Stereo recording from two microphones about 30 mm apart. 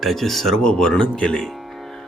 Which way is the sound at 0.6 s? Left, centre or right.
Left.